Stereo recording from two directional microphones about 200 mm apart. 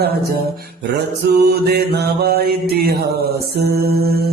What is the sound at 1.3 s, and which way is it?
Mantra, 55° right (ahead or behind).